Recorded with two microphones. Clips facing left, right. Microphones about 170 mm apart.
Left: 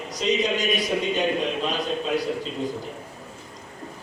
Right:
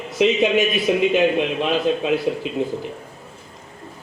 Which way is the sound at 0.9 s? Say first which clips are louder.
Right 7 dB; 90° right.